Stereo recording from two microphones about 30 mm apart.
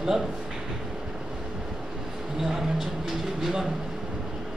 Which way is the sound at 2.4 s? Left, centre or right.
Centre.